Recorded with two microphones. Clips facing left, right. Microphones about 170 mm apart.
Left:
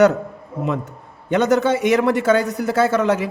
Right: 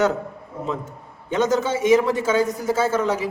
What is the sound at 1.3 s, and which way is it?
A man's voice, 65° left (ahead or behind).